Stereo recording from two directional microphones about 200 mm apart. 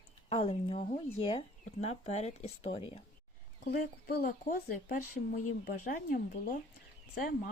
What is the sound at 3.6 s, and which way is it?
Speech, 50° left (ahead or behind).